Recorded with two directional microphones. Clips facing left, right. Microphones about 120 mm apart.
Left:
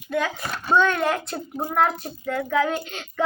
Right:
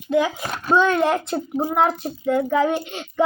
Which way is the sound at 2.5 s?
Centre (ahead or behind).